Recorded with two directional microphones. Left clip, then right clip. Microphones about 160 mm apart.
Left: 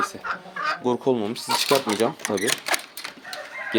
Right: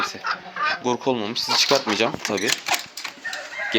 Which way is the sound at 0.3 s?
90° left.